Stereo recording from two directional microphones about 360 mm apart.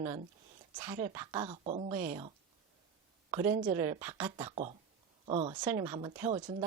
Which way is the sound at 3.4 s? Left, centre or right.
Centre.